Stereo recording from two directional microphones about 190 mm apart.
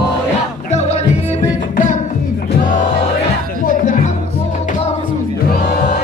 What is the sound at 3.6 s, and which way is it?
Music, 40° left (ahead or behind).